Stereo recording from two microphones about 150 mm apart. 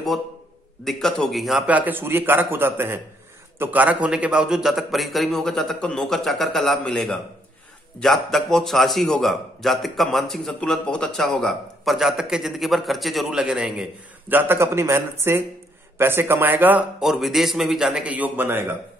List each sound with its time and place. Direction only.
0.8 s a man's voice: 5° left (ahead or behind)
14.3 s speech: 15° right (ahead or behind)